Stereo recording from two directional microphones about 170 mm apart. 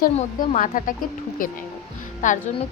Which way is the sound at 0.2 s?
45° left (ahead or behind).